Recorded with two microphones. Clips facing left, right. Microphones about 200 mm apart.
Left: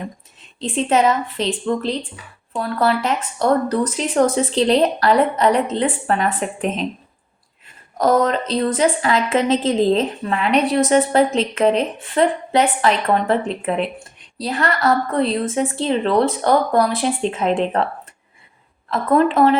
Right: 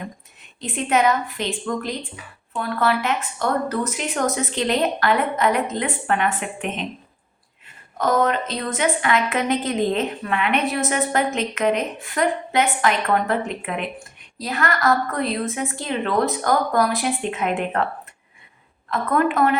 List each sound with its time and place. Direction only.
0.6 s a woman's voice: 30° left (ahead or behind)
7.9 s a woman's voice: 35° left (ahead or behind)
18.9 s a woman's voice: 30° left (ahead or behind)